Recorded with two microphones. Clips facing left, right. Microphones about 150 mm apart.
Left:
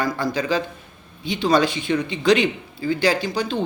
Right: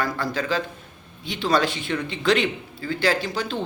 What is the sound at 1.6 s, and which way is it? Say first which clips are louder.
Speech: left 4 dB; 15° left (ahead or behind).